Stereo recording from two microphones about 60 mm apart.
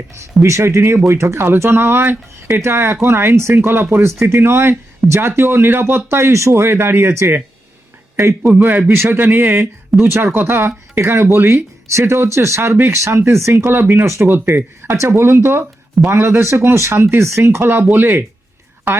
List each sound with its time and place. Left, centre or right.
0.1 s speech: right
8.5 s speech: right
9.9 s speech: centre
10.3 s speech: right